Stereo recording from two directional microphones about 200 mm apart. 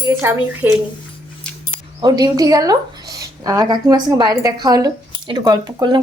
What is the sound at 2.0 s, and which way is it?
Speech, 20° right (ahead or behind).